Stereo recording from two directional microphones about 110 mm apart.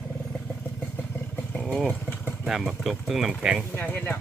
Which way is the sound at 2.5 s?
5° right (ahead or behind).